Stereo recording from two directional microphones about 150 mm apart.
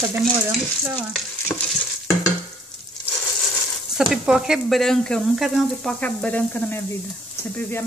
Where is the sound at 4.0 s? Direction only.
5° right (ahead or behind).